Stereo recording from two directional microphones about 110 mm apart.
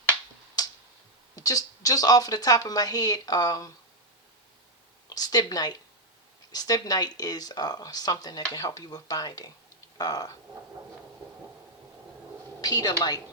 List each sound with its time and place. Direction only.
1.4 s a woman's voice: 35° left (ahead or behind)
5.0 s a woman's voice: 35° left (ahead or behind)
12.6 s a woman's voice: 35° left (ahead or behind)